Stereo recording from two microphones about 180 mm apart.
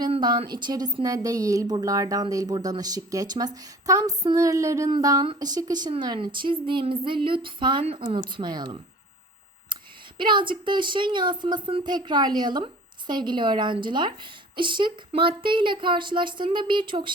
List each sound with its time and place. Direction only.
0.0 s a woman's voice: 25° right (ahead or behind)
10.2 s a woman's voice: 25° right (ahead or behind)